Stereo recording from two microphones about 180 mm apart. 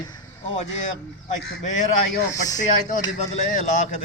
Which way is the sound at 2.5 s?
45° left (ahead or behind).